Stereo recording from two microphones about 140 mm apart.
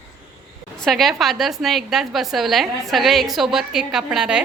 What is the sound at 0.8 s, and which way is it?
A woman's voice, centre (ahead or behind).